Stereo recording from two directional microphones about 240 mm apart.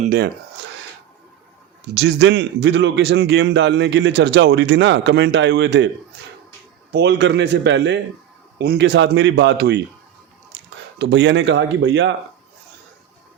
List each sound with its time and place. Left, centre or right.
0.0 s speech: right
2.0 s a man's voice: right
6.9 s a man's voice: right
10.5 s a sound: right
10.9 s a man's voice: right